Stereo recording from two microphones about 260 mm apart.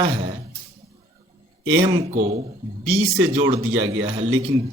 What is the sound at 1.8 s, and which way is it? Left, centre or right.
A man's voice, right.